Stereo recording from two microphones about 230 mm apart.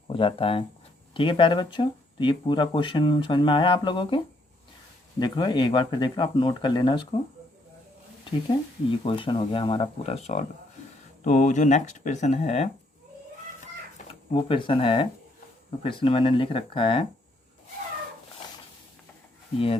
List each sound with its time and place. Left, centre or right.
0.1 s speech: left
5.2 s speech: centre
8.2 s speech: left
14.1 s speech: left